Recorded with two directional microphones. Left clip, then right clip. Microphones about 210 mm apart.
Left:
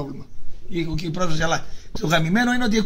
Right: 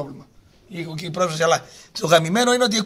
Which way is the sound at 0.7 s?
30° right (ahead or behind).